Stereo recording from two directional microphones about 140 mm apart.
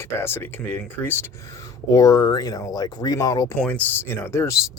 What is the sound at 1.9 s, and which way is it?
Speech, 25° left (ahead or behind).